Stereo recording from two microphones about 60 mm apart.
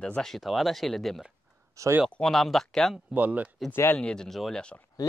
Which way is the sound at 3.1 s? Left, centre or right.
Right.